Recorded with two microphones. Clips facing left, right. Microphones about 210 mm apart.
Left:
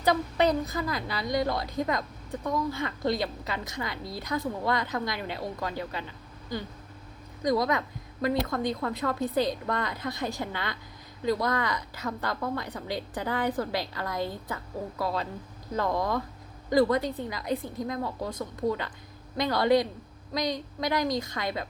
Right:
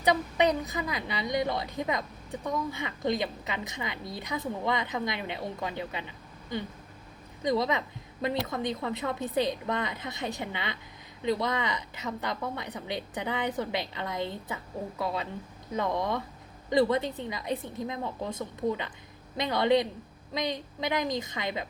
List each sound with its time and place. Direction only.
0.0 s a woman's voice: 15° right (ahead or behind)
20.8 s a woman's voice: 20° right (ahead or behind)